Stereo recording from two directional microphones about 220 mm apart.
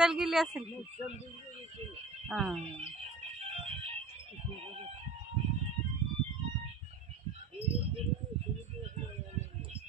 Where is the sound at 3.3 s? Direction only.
25° right (ahead or behind).